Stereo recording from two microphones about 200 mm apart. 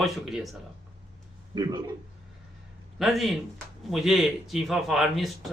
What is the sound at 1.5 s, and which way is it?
Speech, 20° right (ahead or behind).